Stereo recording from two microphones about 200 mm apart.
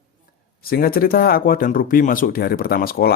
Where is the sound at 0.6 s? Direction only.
50° left (ahead or behind).